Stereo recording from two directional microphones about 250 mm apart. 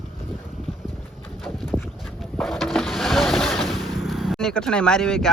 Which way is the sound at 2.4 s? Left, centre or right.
Centre.